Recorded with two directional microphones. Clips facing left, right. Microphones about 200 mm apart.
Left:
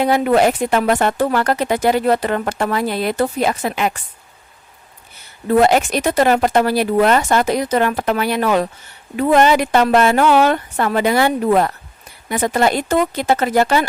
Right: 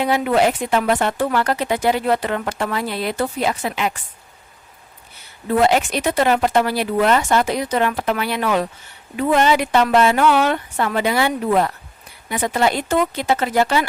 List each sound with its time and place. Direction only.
0.0 s speech: 45° left (ahead or behind)
5.5 s speech: 45° left (ahead or behind)